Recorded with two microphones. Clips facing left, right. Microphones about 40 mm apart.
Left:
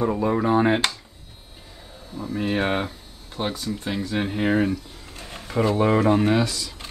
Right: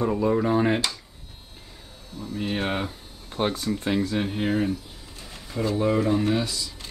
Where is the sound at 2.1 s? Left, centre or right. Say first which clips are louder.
Left 4 dB; centre.